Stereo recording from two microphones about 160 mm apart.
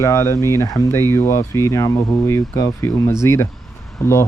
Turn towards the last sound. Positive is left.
turn(degrees=15)  # may be behind; listen again after turning